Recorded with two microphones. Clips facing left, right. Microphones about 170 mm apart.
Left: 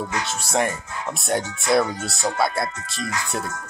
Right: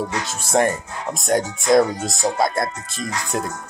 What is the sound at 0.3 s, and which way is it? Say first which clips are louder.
Speech: right 6 dB; 45° right (ahead or behind).